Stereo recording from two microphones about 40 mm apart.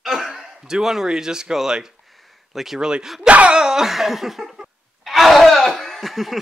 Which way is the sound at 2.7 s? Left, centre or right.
Centre.